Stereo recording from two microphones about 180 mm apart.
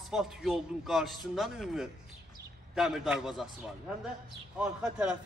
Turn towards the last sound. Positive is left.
turn(degrees=-5)  # may be behind; listen again after turning